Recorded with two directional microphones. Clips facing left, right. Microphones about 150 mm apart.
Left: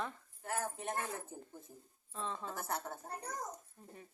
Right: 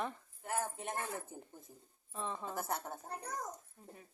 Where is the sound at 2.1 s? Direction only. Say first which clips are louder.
Right 1 dB; 15° right (ahead or behind).